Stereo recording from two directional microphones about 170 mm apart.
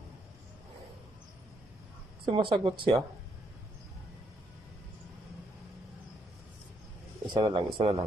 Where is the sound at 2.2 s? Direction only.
30° right (ahead or behind).